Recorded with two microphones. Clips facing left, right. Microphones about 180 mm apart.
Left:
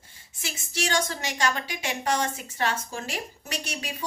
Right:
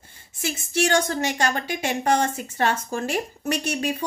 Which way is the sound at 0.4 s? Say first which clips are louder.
Right 8 dB; 50° right (ahead or behind).